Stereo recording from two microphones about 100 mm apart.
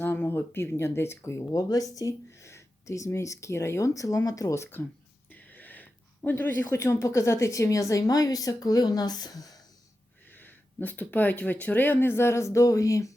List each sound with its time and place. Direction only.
0.0 s a woman's voice: 20° left (ahead or behind)
5.3 s a sound: 15° left (ahead or behind)
6.7 s a woman's voice: 30° left (ahead or behind)
10.3 s speech: 20° left (ahead or behind)